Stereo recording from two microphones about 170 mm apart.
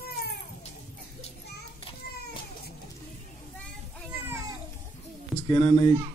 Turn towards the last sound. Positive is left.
turn(degrees=15)  # may be behind; listen again after turning